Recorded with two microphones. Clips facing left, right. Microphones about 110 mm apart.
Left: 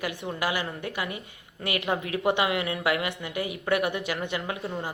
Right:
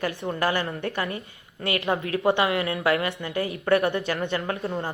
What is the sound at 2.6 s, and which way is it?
Speech, 35° right (ahead or behind).